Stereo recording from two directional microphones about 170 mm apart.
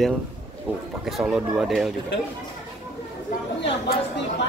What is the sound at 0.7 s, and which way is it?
Speech, 10° right (ahead or behind).